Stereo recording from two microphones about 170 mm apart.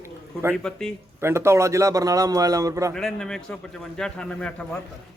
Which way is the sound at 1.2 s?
15° right (ahead or behind).